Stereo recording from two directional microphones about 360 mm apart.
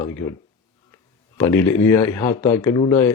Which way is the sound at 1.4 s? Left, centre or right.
Centre.